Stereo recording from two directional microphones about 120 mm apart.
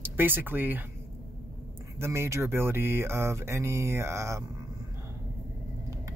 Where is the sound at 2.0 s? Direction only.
20° right (ahead or behind).